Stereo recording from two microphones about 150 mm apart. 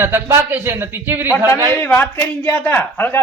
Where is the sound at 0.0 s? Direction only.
15° right (ahead or behind).